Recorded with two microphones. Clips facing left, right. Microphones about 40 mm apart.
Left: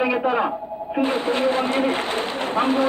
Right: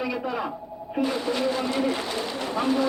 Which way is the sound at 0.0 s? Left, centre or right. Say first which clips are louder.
Left 8 dB; left.